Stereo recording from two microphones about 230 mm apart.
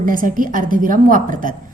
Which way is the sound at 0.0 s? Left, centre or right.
Right.